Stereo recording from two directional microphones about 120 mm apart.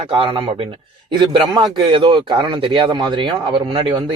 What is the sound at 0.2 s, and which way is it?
Speech, 40° right (ahead or behind).